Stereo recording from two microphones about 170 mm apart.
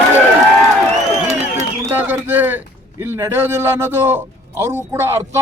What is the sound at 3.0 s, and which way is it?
A man's voice, 15° right (ahead or behind).